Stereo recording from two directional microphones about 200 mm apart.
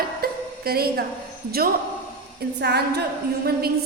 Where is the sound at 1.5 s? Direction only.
50° right (ahead or behind).